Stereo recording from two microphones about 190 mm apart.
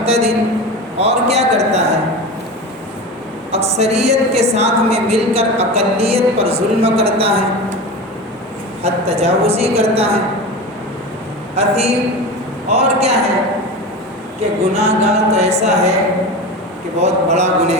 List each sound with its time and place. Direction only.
0.0 s a woman's voice: 35° right (ahead or behind)
3.5 s a woman's voice: 35° right (ahead or behind)
8.8 s a woman's voice: 30° right (ahead or behind)
11.5 s a woman's voice: 35° right (ahead or behind)
14.7 s a woman's voice: 35° right (ahead or behind)
17.0 s a woman's voice: 35° right (ahead or behind)